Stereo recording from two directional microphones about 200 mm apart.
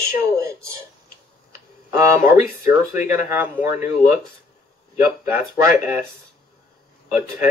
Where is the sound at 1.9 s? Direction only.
10° right (ahead or behind).